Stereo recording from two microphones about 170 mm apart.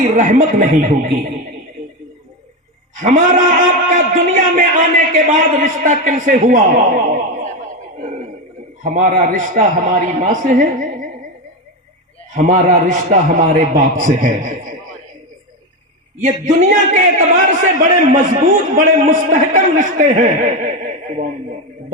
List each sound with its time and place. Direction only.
0.0 s a man's voice: 50° right (ahead or behind)
2.9 s a man's voice: 50° right (ahead or behind)
8.8 s a man's voice: 50° right (ahead or behind)
12.3 s a man's voice: 50° right (ahead or behind)
16.2 s a man's voice: 50° right (ahead or behind)